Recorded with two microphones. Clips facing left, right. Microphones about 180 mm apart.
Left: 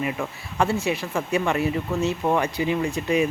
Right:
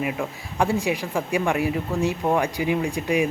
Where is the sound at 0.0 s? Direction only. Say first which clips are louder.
Right 1 dB; 10° right (ahead or behind).